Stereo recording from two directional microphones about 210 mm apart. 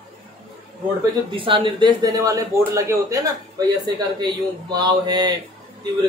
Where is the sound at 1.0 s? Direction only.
25° right (ahead or behind).